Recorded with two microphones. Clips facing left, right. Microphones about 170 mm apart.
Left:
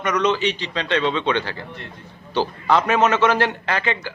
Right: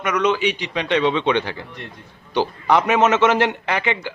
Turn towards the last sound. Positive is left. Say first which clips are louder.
# right 1 dB
turn(degrees=-15)  # may be behind; listen again after turning